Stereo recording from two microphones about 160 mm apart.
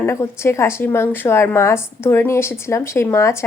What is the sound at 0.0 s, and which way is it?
A woman's voice, 15° left (ahead or behind).